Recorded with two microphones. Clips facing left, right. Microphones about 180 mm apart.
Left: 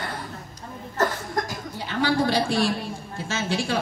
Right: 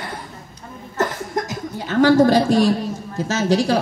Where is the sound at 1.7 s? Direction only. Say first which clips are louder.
Right 10 dB; 45° right (ahead or behind).